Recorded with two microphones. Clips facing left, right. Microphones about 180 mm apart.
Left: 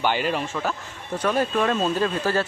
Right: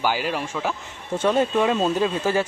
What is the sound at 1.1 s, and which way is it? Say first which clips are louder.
Speech: right 3 dB; 25° right (ahead or behind).